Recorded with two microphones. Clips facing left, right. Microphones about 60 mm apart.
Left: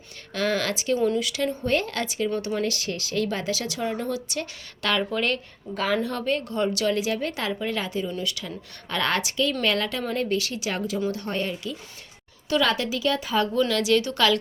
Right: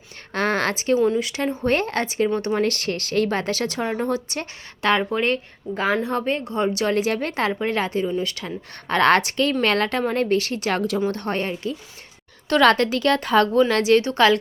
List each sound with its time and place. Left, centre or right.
0.3 s a sound: right
0.9 s speech: centre
1.2 s speech: right
6.9 s speech: right
11.1 s speech: right
12.5 s speech: right
13.6 s speech: right